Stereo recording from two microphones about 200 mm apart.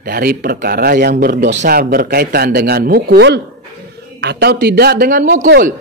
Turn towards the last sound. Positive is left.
turn(degrees=-50)  # may be behind; listen again after turning